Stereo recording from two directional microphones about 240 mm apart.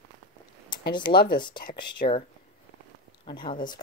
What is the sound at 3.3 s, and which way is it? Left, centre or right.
Speech, centre.